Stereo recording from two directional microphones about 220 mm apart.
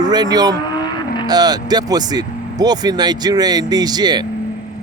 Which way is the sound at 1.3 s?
15° right (ahead or behind).